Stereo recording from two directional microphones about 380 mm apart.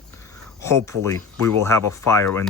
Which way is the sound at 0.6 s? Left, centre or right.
Centre.